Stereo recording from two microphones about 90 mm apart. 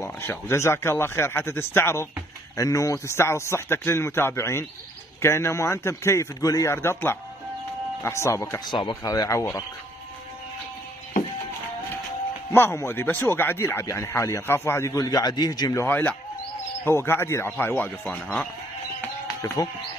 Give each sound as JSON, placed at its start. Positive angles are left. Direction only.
{"t": 0.0, "sound": "a man's voice", "side_deg": 30}
{"t": 2.5, "sound": "a man's voice", "side_deg": 40}
{"t": 8.5, "sound": "speech", "side_deg": 60}
{"t": 9.0, "sound": "a man's voice", "side_deg": 45}
{"t": 12.5, "sound": "a man's voice", "side_deg": 25}
{"t": 15.0, "sound": "a man's voice", "side_deg": 50}
{"t": 15.7, "sound": "a man's voice", "side_deg": 30}